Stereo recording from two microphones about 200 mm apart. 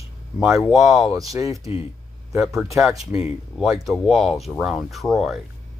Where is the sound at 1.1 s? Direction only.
15° right (ahead or behind).